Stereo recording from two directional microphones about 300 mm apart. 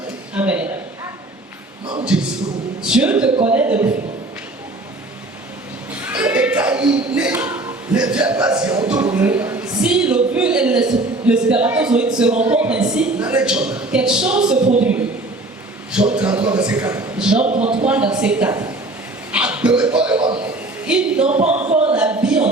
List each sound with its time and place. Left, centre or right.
0.3 s a woman's voice: centre
2.0 s a woman's voice: centre
5.9 s a sound: centre
10.3 s a man's voice: centre
17.4 s speech: right
17.8 s a woman's voice: centre
19.3 s a sound: centre
21.2 s speech: right
21.9 s a sound: centre